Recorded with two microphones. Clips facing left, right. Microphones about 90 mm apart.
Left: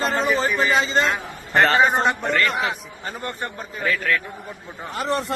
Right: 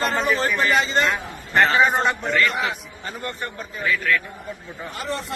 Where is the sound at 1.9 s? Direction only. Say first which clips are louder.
Left 1 dB; 25° left (ahead or behind).